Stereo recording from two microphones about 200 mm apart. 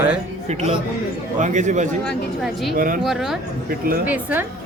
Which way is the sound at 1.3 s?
40° right (ahead or behind).